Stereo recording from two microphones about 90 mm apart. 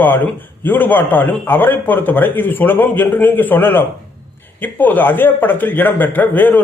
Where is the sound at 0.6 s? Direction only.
20° left (ahead or behind).